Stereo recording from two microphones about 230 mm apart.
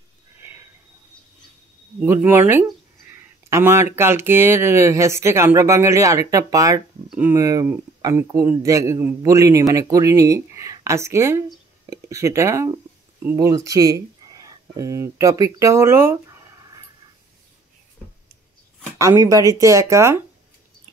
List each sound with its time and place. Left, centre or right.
0.4 s a sound: centre
2.0 s speech: centre
19.2 s speech: centre